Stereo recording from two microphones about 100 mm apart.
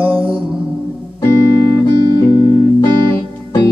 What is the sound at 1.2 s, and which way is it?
Music, 25° left (ahead or behind).